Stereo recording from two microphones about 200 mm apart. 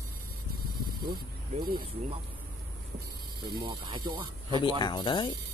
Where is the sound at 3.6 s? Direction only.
20° right (ahead or behind).